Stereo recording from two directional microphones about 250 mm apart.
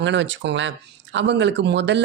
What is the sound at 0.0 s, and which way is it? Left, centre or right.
Speech, right.